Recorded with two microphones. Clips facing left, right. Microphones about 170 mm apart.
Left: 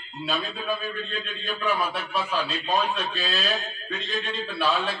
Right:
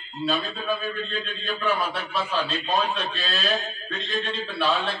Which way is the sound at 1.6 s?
Centre (ahead or behind).